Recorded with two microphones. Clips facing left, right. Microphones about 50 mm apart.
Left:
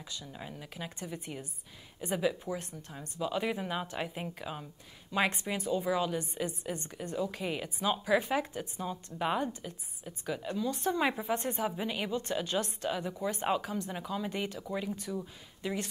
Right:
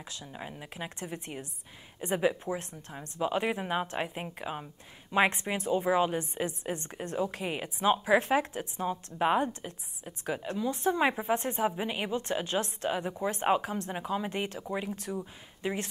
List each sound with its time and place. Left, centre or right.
0.2 s a woman's voice: right
14.9 s a woman's voice: centre
15.6 s a woman's voice: right